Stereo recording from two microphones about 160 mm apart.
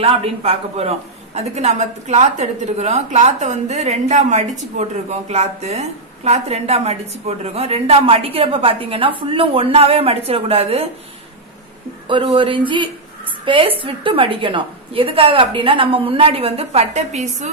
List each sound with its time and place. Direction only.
0.0 s a woman's voice: 35° right (ahead or behind)
12.1 s a woman's voice: 30° right (ahead or behind)